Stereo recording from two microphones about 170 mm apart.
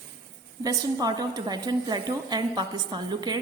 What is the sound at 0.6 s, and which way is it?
A woman's voice, 20° right (ahead or behind).